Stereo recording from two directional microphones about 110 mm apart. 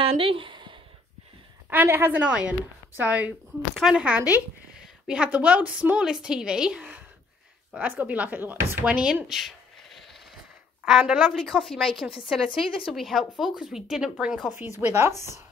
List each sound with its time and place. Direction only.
0.0 s a sound: 55° right (ahead or behind)
1.7 s a woman's voice: 20° right (ahead or behind)
10.9 s a woman's voice: 5° right (ahead or behind)
12.1 s a woman's voice: 50° left (ahead or behind)
12.9 s a woman's voice: centre (ahead or behind)
14.8 s speech: 20° right (ahead or behind)